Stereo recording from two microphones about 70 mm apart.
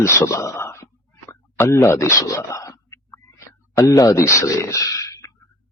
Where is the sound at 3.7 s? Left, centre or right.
Left.